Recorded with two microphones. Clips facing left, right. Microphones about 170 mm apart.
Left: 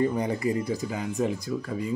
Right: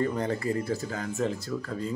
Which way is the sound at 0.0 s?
15° left (ahead or behind).